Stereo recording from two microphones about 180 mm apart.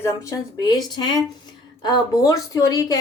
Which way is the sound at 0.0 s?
15° left (ahead or behind).